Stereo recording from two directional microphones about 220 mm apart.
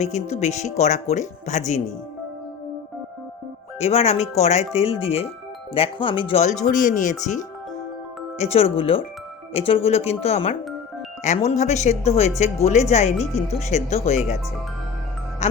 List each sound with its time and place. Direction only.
0.0 s speech: 30° left (ahead or behind)
3.8 s speech: 30° left (ahead or behind)